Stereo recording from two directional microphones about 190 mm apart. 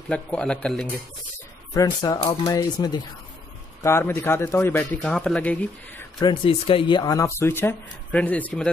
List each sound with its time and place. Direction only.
0.1 s speech: 5° left (ahead or behind)
1.7 s speech: 20° left (ahead or behind)
6.1 s speech: 25° left (ahead or behind); by 8.6 s 10° left (ahead or behind)